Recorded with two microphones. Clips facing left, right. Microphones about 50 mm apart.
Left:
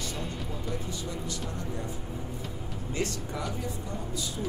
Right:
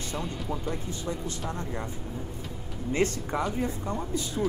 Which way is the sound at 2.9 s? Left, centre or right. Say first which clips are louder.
Right 6 dB; right.